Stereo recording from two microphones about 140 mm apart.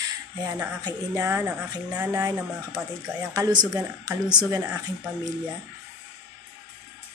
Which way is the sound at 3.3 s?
30° right (ahead or behind).